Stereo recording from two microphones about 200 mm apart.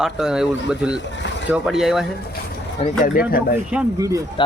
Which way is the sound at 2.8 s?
25° left (ahead or behind).